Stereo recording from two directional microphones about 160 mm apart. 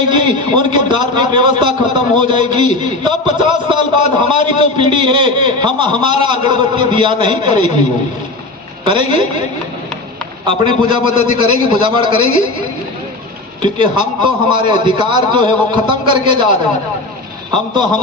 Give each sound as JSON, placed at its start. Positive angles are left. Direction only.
{"t": 0.1, "sound": "a man's voice", "side_deg": -30}
{"t": 8.8, "sound": "a man's voice", "side_deg": -30}
{"t": 10.4, "sound": "a man's voice", "side_deg": -30}
{"t": 13.6, "sound": "a man's voice", "side_deg": -30}